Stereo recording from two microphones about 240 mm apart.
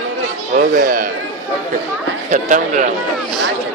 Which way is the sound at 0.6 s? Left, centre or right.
Right.